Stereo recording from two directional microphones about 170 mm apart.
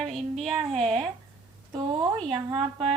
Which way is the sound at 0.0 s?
Centre (ahead or behind).